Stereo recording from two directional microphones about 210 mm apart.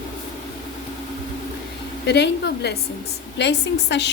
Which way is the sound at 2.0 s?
55° left (ahead or behind).